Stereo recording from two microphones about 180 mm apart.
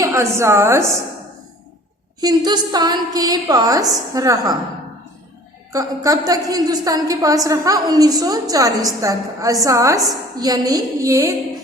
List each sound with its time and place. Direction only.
0.0 s a woman's voice: 15° right (ahead or behind)
2.2 s a woman's voice: 25° right (ahead or behind)
5.7 s a woman's voice: 20° right (ahead or behind)